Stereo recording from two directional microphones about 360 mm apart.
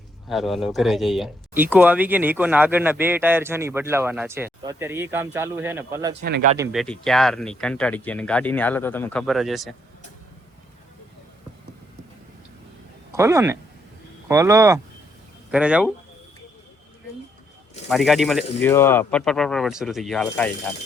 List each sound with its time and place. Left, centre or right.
0.3 s speech: centre
6.2 s speech: right
6.6 s speech: centre
13.1 s speech: centre
17.8 s speech: centre